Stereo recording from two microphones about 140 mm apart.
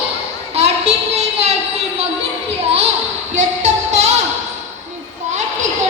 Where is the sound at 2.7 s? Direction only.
45° right (ahead or behind).